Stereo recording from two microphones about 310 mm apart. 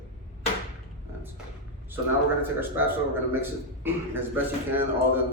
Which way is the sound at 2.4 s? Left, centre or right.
Centre.